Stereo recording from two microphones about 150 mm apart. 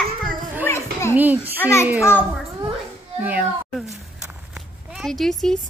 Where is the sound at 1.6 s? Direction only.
20° left (ahead or behind).